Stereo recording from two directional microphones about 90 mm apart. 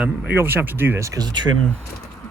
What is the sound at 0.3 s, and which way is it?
Speech, 25° right (ahead or behind).